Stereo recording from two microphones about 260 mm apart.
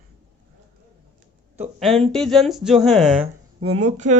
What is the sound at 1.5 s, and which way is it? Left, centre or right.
Speech, centre.